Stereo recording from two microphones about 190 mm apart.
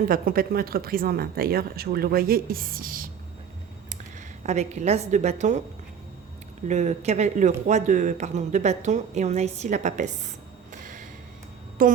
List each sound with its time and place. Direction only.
0.0 s speech: 50° right (ahead or behind)
4.4 s speech: 35° right (ahead or behind)
6.7 s speech: 35° right (ahead or behind)
10.7 s a sound: 45° right (ahead or behind)
11.8 s speech: 50° right (ahead or behind)